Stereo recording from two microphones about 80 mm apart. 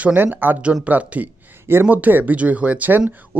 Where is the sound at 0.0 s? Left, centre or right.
Centre.